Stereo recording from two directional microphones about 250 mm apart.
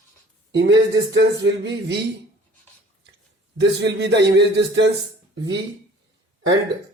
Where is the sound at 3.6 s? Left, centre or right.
Right.